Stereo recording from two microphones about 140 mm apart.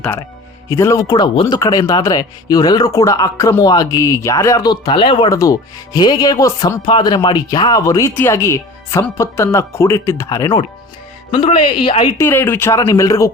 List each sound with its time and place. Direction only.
0.7 s speech: 20° left (ahead or behind); by 5.3 s 40° left (ahead or behind)
5.3 s speech: 25° left (ahead or behind)
11.3 s speech: 40° left (ahead or behind)
12.1 s speech: 15° left (ahead or behind)